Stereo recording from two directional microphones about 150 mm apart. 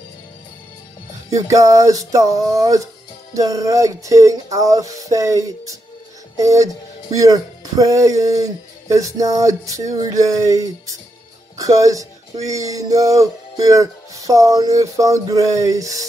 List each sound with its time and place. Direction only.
1.3 s speech: 20° right (ahead or behind)